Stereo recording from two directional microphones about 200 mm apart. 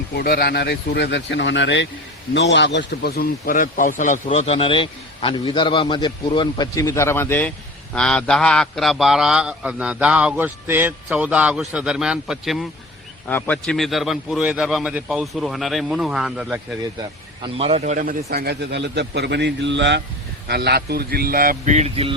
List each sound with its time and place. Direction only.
0.2 s a man's voice: 50° left (ahead or behind); by 12.6 s centre (ahead or behind)
13.2 s a man's voice: 10° left (ahead or behind)
17.4 s a man's voice: 25° right (ahead or behind)